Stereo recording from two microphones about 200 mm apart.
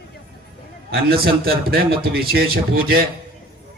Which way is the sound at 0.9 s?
50° right (ahead or behind).